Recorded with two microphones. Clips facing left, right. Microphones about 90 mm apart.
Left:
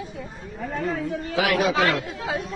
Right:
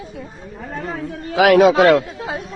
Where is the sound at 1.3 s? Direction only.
90° right.